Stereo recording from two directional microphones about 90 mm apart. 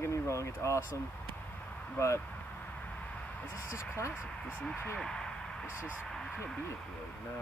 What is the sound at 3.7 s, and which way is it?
Speech, 30° left (ahead or behind).